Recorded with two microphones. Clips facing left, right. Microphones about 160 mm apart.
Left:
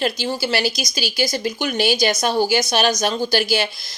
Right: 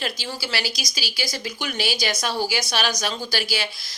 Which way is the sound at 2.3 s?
20° left (ahead or behind).